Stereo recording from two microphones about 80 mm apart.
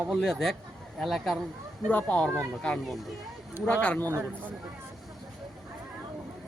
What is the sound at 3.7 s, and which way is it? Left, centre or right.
Speech, centre.